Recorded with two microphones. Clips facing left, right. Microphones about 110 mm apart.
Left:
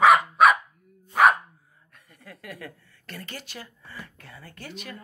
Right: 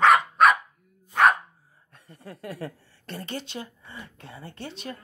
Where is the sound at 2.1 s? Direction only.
30° right (ahead or behind).